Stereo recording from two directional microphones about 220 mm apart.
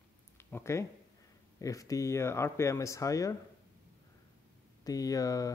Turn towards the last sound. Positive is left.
turn(degrees=15)  # may be behind; listen again after turning